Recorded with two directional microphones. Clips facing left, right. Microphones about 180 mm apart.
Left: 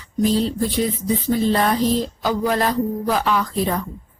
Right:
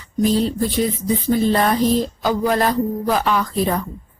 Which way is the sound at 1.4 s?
50° right (ahead or behind).